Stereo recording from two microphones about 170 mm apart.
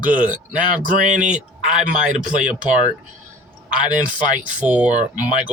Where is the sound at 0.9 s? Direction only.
50° right (ahead or behind).